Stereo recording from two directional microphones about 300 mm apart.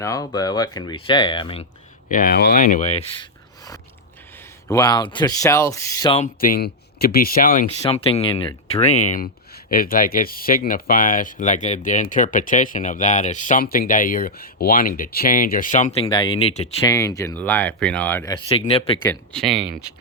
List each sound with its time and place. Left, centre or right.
0.0 s speech: centre
2.0 s speech: left; by 18.3 s centre
18.4 s speech: centre
19.0 s speech: centre